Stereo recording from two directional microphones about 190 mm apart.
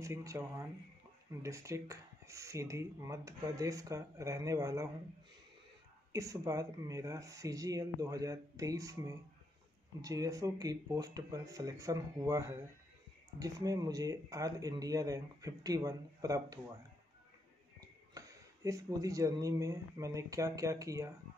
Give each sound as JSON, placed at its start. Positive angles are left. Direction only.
{"t": 0.0, "sound": "speech", "side_deg": -15}
{"t": 6.1, "sound": "speech", "side_deg": -15}
{"t": 18.1, "sound": "speech", "side_deg": -15}